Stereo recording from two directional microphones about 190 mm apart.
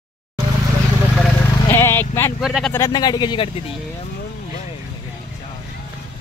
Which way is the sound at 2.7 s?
20° left (ahead or behind).